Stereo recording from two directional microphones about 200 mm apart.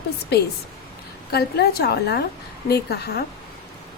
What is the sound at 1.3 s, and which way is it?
Speech, 55° left (ahead or behind).